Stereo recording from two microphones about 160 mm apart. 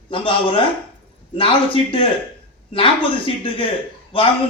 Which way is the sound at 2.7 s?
35° left (ahead or behind).